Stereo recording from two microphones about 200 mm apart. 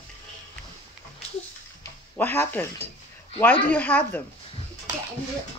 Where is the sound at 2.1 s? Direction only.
10° left (ahead or behind).